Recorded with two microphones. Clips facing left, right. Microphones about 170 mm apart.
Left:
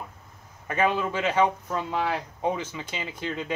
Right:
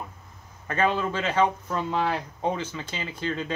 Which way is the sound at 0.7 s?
15° left (ahead or behind).